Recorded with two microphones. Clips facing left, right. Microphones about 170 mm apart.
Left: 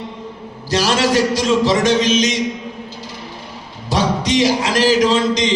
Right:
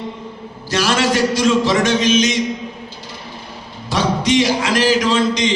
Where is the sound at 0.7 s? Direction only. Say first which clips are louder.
Left 1 dB; 35° left (ahead or behind).